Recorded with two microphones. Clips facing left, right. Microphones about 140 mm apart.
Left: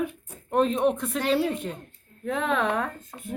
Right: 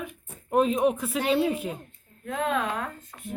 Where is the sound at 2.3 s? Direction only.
80° left.